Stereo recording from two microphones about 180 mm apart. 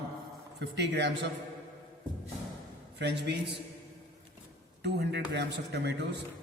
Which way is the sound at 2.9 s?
70° right (ahead or behind).